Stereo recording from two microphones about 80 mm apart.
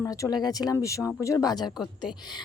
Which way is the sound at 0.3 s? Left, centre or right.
Left.